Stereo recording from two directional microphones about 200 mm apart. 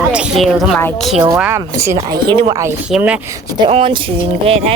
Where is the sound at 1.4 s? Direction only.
10° right (ahead or behind).